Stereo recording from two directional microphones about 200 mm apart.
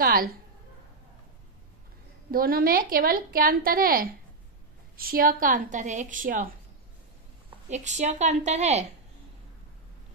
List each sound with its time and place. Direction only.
0.0 s a sound: 45° right (ahead or behind)
2.3 s a woman's voice: 50° right (ahead or behind)
7.7 s a woman's voice: 35° right (ahead or behind)